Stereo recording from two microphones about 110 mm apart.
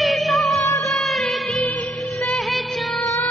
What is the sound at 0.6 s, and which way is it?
Music, 30° left (ahead or behind).